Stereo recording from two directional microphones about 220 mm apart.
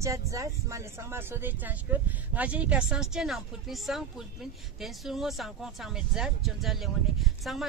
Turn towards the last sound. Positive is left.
turn(degrees=0)  # may be behind; listen again after turning